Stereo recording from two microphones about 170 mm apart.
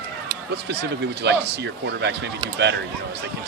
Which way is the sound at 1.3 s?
90° right.